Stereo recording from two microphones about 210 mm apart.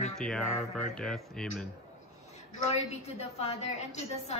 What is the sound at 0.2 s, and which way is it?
Speech, 5° left (ahead or behind).